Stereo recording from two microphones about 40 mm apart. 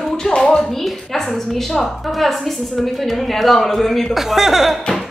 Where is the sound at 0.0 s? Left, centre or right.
Centre.